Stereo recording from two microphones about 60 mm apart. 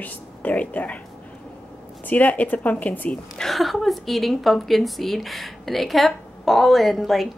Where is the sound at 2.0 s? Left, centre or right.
Left.